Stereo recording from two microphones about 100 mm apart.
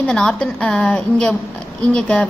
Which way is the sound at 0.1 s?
5° left (ahead or behind).